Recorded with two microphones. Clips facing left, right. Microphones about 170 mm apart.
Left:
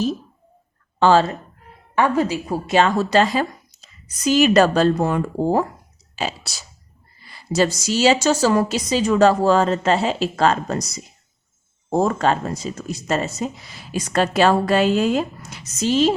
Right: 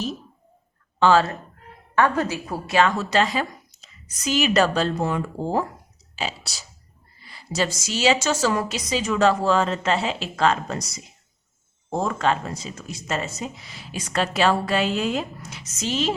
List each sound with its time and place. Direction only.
0.9 s speech: 35° left (ahead or behind)
2.0 s a woman's voice: 10° left (ahead or behind)
2.7 s a woman's voice: 30° left (ahead or behind); by 5.6 s 50° left (ahead or behind)
7.5 s a woman's voice: 40° left (ahead or behind)
11.9 s a woman's voice: 40° left (ahead or behind)